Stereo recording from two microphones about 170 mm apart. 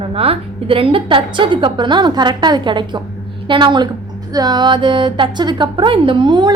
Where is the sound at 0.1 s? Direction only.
35° right (ahead or behind).